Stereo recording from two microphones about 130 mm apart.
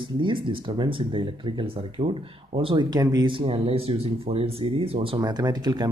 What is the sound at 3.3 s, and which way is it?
Speech, 40° right (ahead or behind).